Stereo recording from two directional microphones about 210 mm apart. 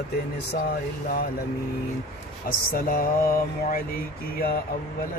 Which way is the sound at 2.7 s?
45° left (ahead or behind).